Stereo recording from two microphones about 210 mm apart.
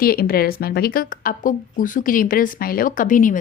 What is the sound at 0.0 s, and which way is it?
Speech, 45° left (ahead or behind).